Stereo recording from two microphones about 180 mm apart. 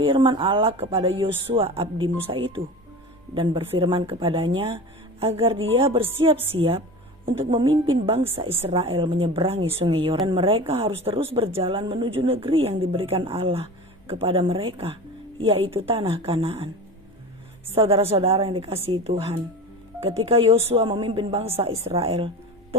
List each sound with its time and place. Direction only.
0.0 s a woman's voice: 30° right (ahead or behind)
17.7 s a woman's voice: 35° right (ahead or behind)